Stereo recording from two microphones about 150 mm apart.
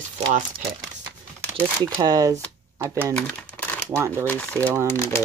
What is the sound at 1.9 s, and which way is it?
Speech, 25° right (ahead or behind).